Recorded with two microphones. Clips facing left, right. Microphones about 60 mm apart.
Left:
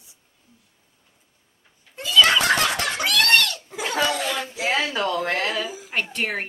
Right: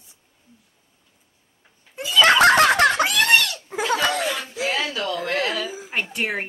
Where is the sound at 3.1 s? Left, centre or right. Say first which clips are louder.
Right 1 dB; centre.